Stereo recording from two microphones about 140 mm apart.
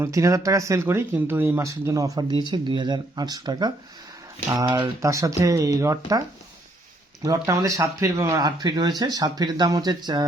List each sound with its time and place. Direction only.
0.0 s speech: 20° right (ahead or behind)